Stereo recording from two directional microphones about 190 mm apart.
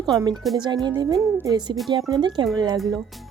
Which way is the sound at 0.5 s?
25° right (ahead or behind).